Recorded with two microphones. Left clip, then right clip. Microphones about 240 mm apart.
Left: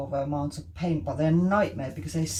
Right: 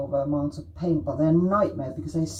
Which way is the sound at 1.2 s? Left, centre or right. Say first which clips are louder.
Right 2 dB; left.